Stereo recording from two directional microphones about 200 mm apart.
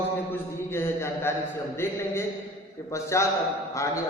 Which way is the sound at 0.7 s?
10° left (ahead or behind).